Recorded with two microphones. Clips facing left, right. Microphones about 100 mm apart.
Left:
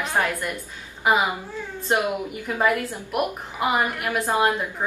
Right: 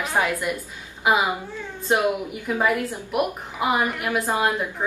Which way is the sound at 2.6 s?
Centre (ahead or behind).